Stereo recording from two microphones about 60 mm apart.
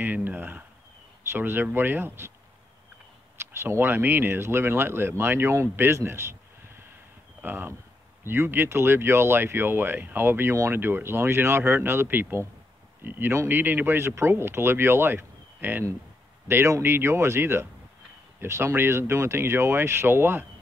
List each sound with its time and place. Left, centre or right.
0.0 s a sound: right
1.3 s speech: right
3.6 s speech: right
7.4 s speech: right
13.9 s speech: right
16.4 s speech: right